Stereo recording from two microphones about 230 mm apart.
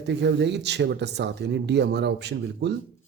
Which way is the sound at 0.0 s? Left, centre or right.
Right.